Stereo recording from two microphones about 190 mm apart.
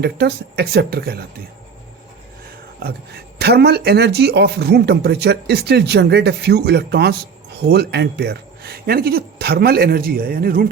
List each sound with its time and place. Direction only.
0.0 s speech: 60° right (ahead or behind)
2.8 s speech: 55° right (ahead or behind)